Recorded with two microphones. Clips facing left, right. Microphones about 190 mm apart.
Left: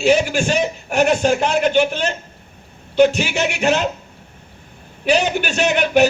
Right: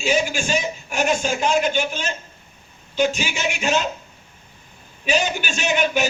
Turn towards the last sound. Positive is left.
turn(degrees=65)  # may be behind; listen again after turning